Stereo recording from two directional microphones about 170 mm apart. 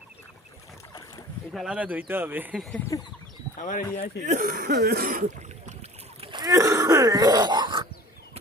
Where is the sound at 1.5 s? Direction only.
5° right (ahead or behind).